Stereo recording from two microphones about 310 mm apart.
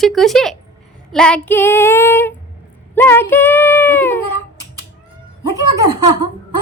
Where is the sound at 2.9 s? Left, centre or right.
Centre.